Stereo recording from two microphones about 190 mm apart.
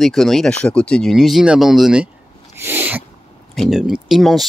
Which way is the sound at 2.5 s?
10° right (ahead or behind).